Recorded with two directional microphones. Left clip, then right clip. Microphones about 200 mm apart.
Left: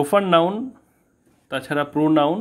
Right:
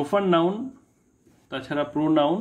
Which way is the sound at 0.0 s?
35° left (ahead or behind).